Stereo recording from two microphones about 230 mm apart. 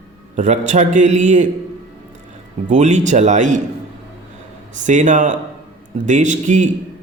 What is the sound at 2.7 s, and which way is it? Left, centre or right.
Speech, right.